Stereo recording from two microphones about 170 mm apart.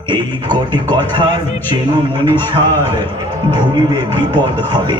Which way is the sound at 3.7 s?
25° right (ahead or behind).